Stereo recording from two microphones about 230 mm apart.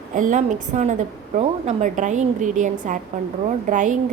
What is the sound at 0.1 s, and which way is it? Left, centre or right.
A woman's voice, right.